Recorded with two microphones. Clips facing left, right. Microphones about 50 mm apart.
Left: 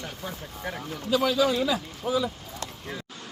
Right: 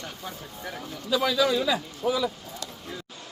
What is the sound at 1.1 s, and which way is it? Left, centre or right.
Speech, right.